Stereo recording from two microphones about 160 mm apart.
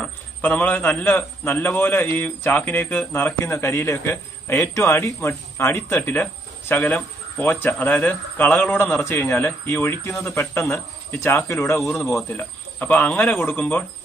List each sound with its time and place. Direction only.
0.0 s a man's voice: 10° left (ahead or behind)